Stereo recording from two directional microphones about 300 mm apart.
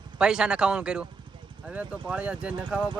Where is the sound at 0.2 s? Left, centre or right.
Centre.